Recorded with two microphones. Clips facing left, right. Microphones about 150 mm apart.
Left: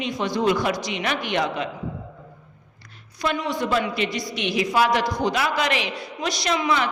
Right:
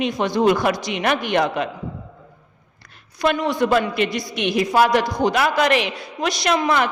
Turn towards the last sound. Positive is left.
turn(degrees=-50)  # may be behind; listen again after turning